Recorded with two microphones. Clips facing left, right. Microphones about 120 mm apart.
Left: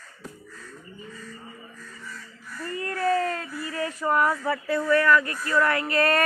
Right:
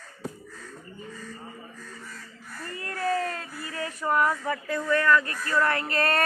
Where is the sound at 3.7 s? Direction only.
30° left (ahead or behind).